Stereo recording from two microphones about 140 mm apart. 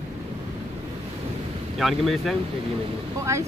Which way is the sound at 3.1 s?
20° right (ahead or behind).